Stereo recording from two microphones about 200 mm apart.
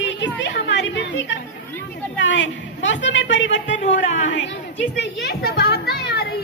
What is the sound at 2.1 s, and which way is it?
A woman's voice, 65° left (ahead or behind).